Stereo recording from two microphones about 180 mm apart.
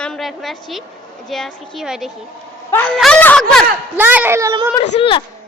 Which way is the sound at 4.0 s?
10° right (ahead or behind).